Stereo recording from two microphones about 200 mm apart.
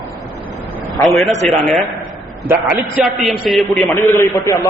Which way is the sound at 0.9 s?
Centre (ahead or behind).